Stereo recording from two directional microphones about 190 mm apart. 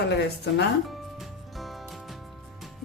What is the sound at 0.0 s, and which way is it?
Speech, 65° left (ahead or behind).